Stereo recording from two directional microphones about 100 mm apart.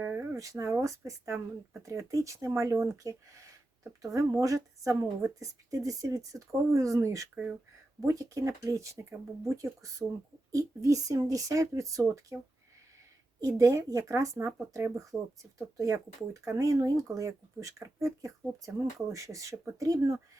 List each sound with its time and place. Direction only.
0.0 s a sound: 20° right (ahead or behind)
0.3 s speech: 35° right (ahead or behind)
13.4 s speech: 30° right (ahead or behind)